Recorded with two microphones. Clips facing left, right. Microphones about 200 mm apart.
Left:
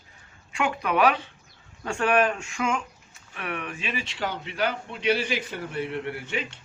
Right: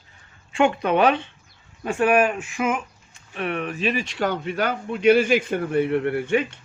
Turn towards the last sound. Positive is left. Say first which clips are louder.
# right 10 dB
turn(degrees=-55)  # may be behind; listen again after turning